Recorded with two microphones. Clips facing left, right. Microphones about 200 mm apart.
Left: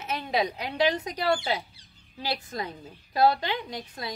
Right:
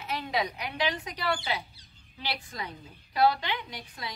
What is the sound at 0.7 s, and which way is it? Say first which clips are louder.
A woman's voice: left 7 dB; 40° left (ahead or behind).